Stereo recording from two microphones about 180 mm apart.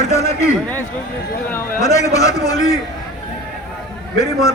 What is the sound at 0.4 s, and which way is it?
A man's voice, 10° left (ahead or behind).